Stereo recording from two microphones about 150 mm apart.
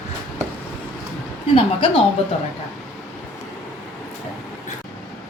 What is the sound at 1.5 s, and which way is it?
Speech, 40° left (ahead or behind).